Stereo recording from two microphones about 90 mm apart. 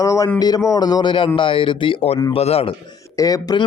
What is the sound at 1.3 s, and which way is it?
Speech, 75° left (ahead or behind).